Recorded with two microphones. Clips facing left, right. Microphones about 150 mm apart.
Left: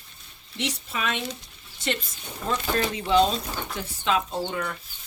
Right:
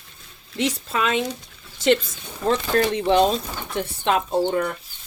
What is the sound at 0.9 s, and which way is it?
Speech, 90° right.